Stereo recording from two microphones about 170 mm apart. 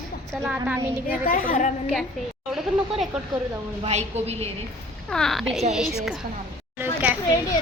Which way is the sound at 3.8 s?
40° right (ahead or behind).